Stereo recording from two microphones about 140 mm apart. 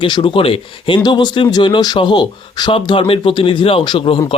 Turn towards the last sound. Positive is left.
turn(degrees=35)  # may be behind; listen again after turning